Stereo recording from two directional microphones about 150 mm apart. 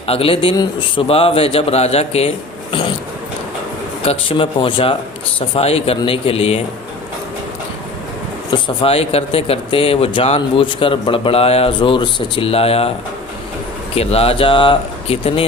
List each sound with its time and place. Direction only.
0.1 s speech: 40° left (ahead or behind)
4.0 s speech: 40° left (ahead or behind)
8.5 s speech: 35° left (ahead or behind)
13.9 s speech: 40° left (ahead or behind)